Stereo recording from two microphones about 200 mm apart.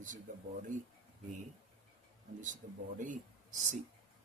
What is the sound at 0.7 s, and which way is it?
Speech, 40° right (ahead or behind).